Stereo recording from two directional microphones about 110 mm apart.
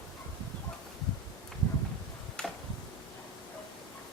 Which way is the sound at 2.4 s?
5° left (ahead or behind).